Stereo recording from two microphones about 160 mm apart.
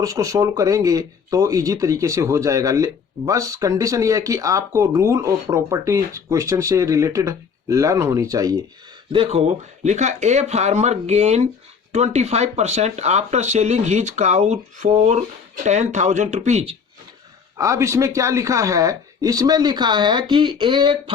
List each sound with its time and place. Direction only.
0.0 s speech: 20° right (ahead or behind)
9.1 s speech: 35° right (ahead or behind)
9.8 s speech: 45° right (ahead or behind)
17.6 s speech: 20° right (ahead or behind)